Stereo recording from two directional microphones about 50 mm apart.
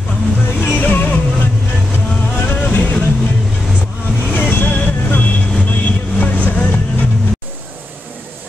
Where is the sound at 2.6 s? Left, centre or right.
Left.